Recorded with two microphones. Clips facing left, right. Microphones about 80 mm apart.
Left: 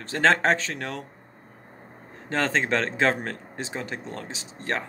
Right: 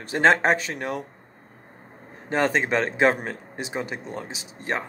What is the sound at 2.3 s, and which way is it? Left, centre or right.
Speech, centre.